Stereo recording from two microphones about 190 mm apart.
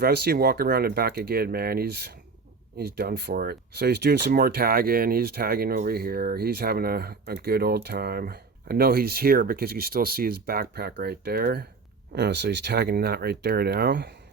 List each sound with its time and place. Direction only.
0.0 s speech: 55° right (ahead or behind)